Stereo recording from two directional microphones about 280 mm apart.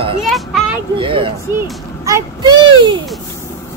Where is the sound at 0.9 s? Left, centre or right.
Centre.